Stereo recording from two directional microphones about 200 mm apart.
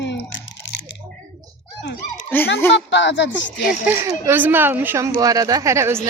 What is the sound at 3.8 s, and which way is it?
Speech, 10° right (ahead or behind).